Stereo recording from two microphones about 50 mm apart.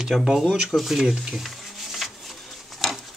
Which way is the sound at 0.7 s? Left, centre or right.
Centre.